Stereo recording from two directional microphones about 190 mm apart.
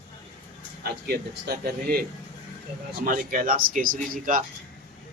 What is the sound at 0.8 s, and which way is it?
Speech, 55° right (ahead or behind).